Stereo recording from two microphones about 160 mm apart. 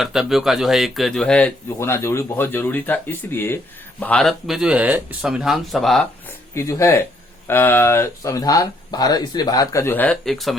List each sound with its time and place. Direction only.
0.0 s speech: centre (ahead or behind)
6.5 s speech: 20° left (ahead or behind); by 10.6 s centre (ahead or behind)